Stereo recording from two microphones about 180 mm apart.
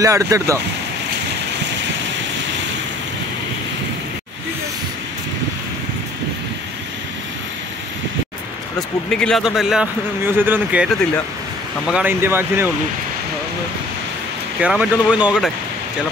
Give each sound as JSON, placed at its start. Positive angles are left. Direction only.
{"t": 0.0, "sound": "speech", "side_deg": -15}
{"t": 8.7, "sound": "a man's voice", "side_deg": 5}
{"t": 11.9, "sound": "speech", "side_deg": -10}
{"t": 14.6, "sound": "a man's voice", "side_deg": -5}